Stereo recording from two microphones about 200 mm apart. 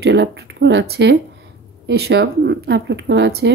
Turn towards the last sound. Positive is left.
turn(degrees=-60)  # may be behind; listen again after turning